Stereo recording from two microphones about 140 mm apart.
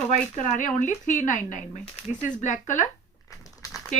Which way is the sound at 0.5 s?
65° left (ahead or behind).